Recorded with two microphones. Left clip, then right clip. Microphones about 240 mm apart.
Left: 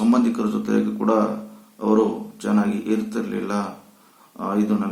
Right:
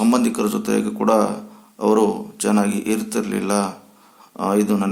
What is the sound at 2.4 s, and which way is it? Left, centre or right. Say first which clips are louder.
A man's voice: right 3 dB; right.